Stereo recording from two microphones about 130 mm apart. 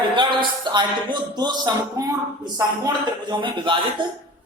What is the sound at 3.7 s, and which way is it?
Speech, 40° right (ahead or behind).